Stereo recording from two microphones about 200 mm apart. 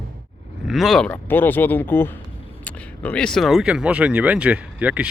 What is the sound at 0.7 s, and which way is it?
Speech, centre (ahead or behind).